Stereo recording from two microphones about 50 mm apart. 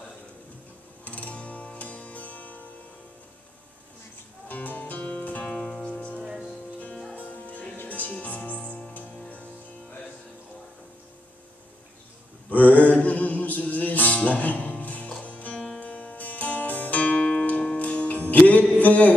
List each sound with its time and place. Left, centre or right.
1.0 s music: left
4.5 s music: left
5.4 s music: centre
6.2 s music: centre
7.2 s music: left
12.4 s music: left
18.8 s a sound: left